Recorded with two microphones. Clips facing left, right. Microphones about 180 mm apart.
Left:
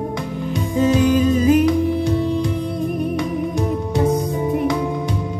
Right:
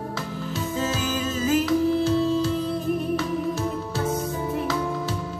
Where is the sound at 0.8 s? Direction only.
15° left (ahead or behind).